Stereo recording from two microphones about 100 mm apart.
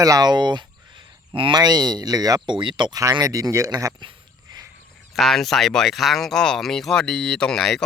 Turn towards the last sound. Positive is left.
turn(degrees=5)  # may be behind; listen again after turning